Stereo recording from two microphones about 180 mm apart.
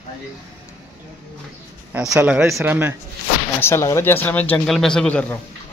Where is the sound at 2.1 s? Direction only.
10° right (ahead or behind).